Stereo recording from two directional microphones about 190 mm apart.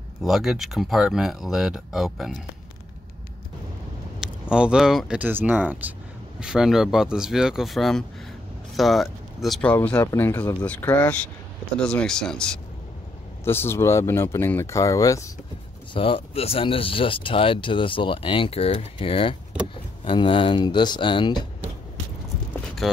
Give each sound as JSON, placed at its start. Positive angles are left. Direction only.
{"t": 0.2, "sound": "speech", "side_deg": 0}
{"t": 4.2, "sound": "speech", "side_deg": -5}
{"t": 15.9, "sound": "speech", "side_deg": 25}